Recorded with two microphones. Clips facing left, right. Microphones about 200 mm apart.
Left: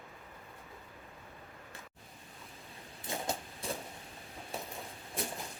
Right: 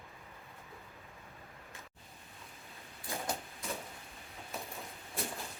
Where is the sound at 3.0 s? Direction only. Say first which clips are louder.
Left 1 dB; 25° left (ahead or behind).